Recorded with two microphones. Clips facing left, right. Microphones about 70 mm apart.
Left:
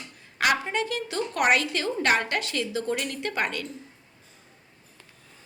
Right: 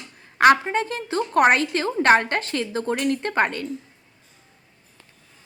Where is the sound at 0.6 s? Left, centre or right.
Right.